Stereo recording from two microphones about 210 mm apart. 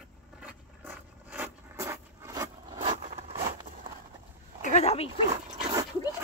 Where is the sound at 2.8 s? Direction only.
30° right (ahead or behind).